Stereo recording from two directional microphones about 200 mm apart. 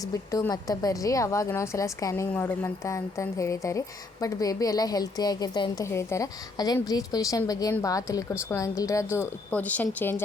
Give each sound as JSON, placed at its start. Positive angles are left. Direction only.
{"t": 0.1, "sound": "a woman's voice", "side_deg": 15}